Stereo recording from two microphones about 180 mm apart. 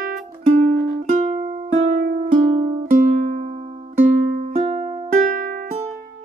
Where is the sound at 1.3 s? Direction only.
30° right (ahead or behind).